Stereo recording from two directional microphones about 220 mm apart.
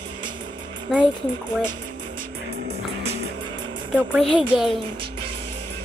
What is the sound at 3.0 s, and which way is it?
Music, 20° right (ahead or behind).